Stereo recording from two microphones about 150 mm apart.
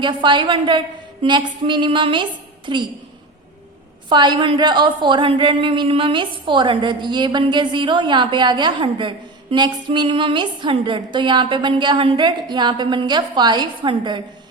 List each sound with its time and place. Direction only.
0.0 s a woman's voice: 30° right (ahead or behind)
4.1 s a woman's voice: 30° right (ahead or behind)